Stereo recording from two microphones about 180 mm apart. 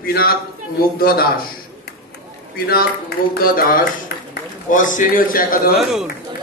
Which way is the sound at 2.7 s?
55° left (ahead or behind).